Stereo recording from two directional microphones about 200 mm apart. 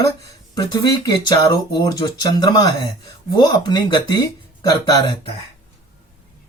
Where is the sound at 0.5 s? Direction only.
20° left (ahead or behind).